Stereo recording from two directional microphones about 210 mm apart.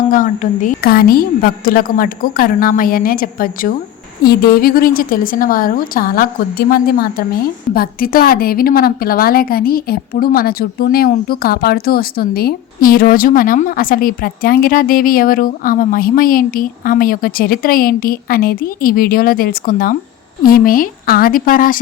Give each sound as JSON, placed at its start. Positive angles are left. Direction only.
{"t": 0.1, "sound": "a woman's voice", "side_deg": 40}